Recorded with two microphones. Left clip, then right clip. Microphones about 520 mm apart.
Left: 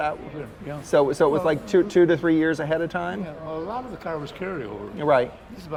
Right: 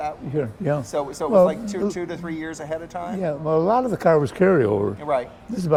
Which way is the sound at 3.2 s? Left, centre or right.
Right.